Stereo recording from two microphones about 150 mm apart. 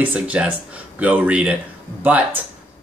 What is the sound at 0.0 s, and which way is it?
Speech, 10° right (ahead or behind).